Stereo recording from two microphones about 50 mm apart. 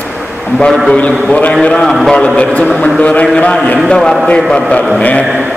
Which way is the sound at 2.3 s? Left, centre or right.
Left.